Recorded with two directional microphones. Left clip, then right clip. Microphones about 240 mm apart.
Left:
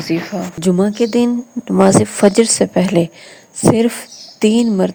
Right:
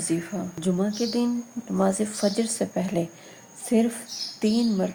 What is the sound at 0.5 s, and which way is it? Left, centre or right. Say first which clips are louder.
A woman's voice: left 12 dB; left.